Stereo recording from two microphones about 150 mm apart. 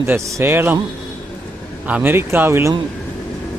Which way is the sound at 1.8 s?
10° right (ahead or behind).